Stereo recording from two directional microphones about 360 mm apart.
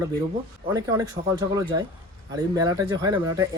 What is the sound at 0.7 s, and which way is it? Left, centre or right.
Speech, centre.